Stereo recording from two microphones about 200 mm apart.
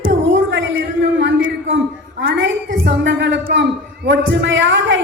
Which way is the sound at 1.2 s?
65° right (ahead or behind).